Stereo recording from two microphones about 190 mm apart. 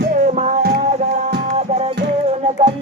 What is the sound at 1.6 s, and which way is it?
Music, 35° right (ahead or behind).